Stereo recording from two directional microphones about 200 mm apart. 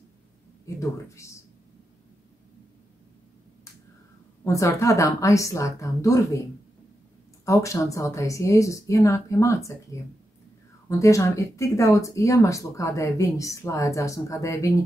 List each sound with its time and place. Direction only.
0.7 s speech: 15° left (ahead or behind)
4.5 s speech: 15° left (ahead or behind)
7.4 s speech: 15° left (ahead or behind)
10.9 s speech: 15° left (ahead or behind)